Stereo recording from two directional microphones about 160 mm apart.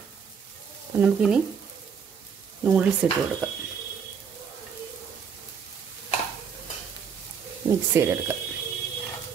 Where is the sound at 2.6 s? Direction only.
10° right (ahead or behind).